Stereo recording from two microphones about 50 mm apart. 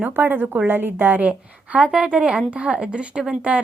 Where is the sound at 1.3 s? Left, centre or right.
Right.